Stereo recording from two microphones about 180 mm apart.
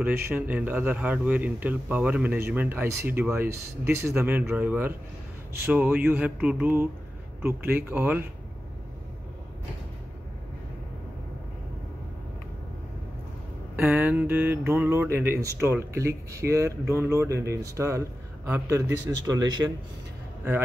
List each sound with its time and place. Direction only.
0.0 s speech: 10° right (ahead or behind)
13.7 s a sound: 10° right (ahead or behind)
14.6 s speech: 10° right (ahead or behind)